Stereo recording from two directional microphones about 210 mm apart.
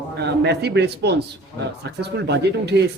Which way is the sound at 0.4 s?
50° right (ahead or behind).